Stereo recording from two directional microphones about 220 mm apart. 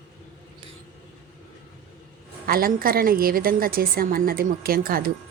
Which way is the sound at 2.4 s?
40° right (ahead or behind).